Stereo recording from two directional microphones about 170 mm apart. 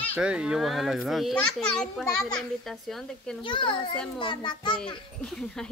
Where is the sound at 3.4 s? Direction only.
30° left (ahead or behind).